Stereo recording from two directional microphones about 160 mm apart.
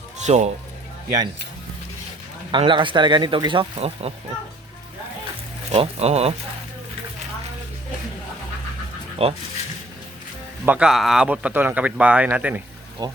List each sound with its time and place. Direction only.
0.3 s speech: 45° right (ahead or behind)
2.5 s speech: 30° right (ahead or behind)
5.7 s speech: 40° right (ahead or behind)
9.2 s speech: 40° right (ahead or behind)
10.7 s speech: 5° right (ahead or behind)
13.0 s speech: 25° right (ahead or behind)